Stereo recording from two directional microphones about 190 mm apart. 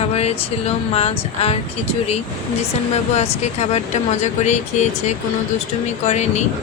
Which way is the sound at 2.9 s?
35° left (ahead or behind).